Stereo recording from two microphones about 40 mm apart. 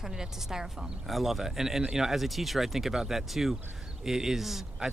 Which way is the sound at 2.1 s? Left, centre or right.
Centre.